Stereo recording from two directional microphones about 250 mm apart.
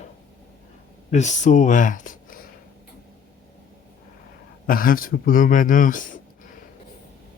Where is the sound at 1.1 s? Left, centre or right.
Left.